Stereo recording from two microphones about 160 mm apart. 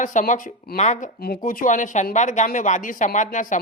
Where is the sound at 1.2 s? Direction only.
65° left (ahead or behind).